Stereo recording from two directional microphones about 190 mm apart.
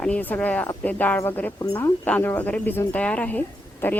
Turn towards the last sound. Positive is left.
turn(degrees=10)  # may be behind; listen again after turning